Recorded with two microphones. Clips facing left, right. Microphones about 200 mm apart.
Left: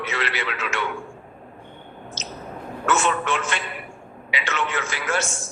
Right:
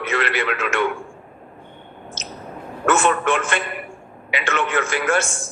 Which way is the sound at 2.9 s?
55° right (ahead or behind).